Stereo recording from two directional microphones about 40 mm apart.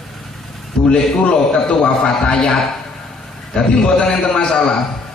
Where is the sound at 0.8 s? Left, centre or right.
Left.